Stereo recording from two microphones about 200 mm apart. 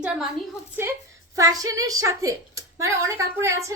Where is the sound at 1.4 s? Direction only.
15° right (ahead or behind).